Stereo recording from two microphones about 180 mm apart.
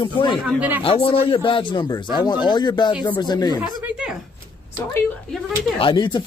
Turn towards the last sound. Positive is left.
turn(degrees=25)  # may be behind; listen again after turning